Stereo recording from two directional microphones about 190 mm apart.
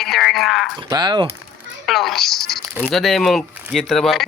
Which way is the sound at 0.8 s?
20° right (ahead or behind).